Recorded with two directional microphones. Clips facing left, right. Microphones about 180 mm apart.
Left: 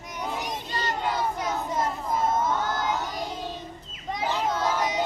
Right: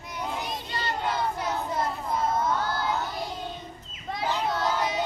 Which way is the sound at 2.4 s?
20° left (ahead or behind).